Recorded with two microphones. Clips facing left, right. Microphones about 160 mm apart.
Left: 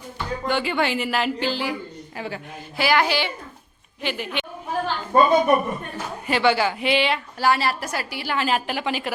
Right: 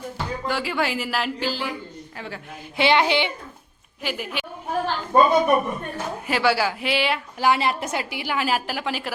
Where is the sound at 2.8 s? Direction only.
25° right (ahead or behind).